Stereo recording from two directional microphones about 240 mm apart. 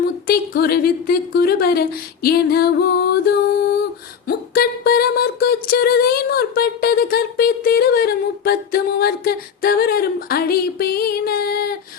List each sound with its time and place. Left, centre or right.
0.0 s music: left